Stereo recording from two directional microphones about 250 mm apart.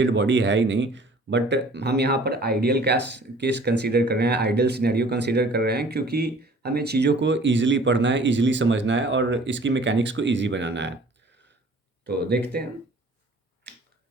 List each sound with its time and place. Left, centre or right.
0.0 s speech: right
12.0 s speech: right